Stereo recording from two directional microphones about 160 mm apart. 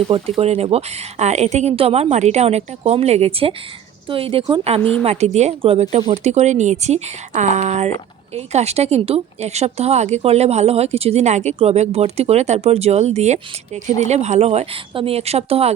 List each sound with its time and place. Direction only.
0.1 s speech: 40° right (ahead or behind)
5.0 s speech: 45° right (ahead or behind)